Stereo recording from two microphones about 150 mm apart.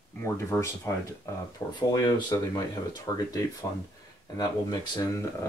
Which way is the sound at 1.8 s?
30° left (ahead or behind).